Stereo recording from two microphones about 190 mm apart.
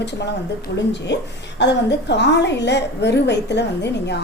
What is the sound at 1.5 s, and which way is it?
A woman's voice, 65° left (ahead or behind).